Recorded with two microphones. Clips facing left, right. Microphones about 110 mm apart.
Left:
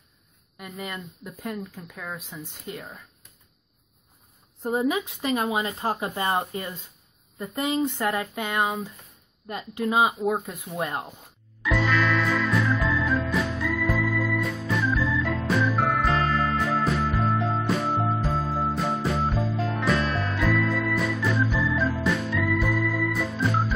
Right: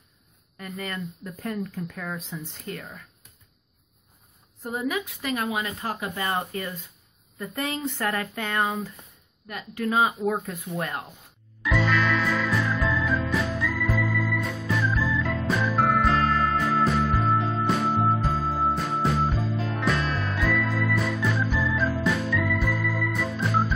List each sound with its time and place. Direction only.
0.6 s speech: 15° left (ahead or behind)
4.6 s speech: 25° left (ahead or behind)
9.5 s speech: 25° left (ahead or behind)
11.8 s music: centre (ahead or behind)